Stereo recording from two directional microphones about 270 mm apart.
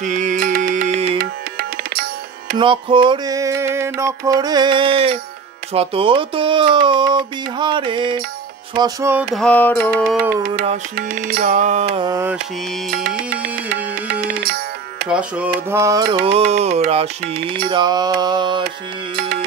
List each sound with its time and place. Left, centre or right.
0.0 s tabla: right
2.5 s music: centre
7.5 s mantra: centre
9.3 s mantra: centre
10.4 s music: right; by 12.4 s centre
12.9 s music: right
13.9 s tabla: right
15.0 s mantra: centre; by 16.4 s right
16.5 s music: right
17.6 s mantra: centre
19.1 s music: right